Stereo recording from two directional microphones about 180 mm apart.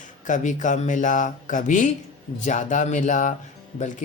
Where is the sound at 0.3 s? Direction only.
45° left (ahead or behind).